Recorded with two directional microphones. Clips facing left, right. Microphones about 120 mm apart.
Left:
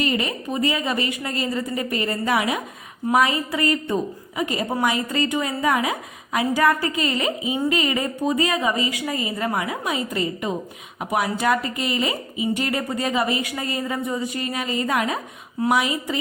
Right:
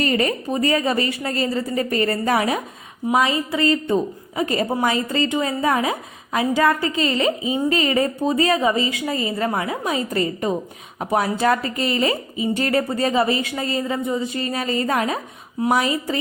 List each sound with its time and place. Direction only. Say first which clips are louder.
0.0 s a woman's voice: right 3 dB; 40° right (ahead or behind)
3.1 s a woman's voice: even; 25° right (ahead or behind)
4.4 s a woman's voice: right 3 dB; 35° right (ahead or behind)
11.0 s a woman's voice: right 3 dB; 30° right (ahead or behind)